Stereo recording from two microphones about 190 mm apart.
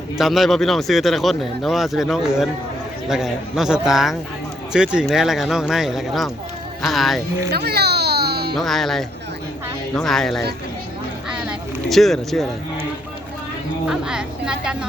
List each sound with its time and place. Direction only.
0.2 s speech: centre (ahead or behind)
7.5 s music: 55° right (ahead or behind)
8.5 s speech: centre (ahead or behind)
11.3 s a sound: centre (ahead or behind)
13.8 s speech: 5° right (ahead or behind)